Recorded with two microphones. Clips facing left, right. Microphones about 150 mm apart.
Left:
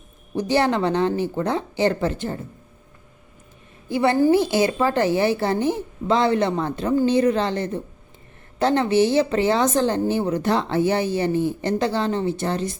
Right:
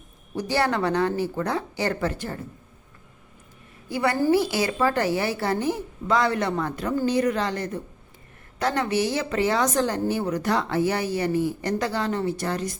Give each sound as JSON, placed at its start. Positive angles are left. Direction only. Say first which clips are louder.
{"t": 0.3, "sound": "a woman's voice", "louder": "left 4 dB", "side_deg": 20}
{"t": 3.8, "sound": "a woman's voice", "louder": "left 4 dB", "side_deg": 25}